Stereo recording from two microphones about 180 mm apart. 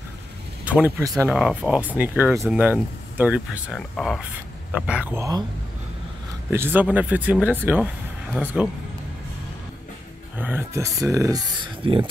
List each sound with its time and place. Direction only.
0.7 s speech: 10° right (ahead or behind)
1.3 s speech: 5° right (ahead or behind)
6.5 s speech: 10° right (ahead or behind)
10.3 s speech: 10° right (ahead or behind)
11.8 s speech: 30° right (ahead or behind)